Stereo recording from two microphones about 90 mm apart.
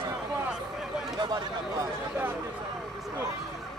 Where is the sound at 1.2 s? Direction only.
45° right (ahead or behind).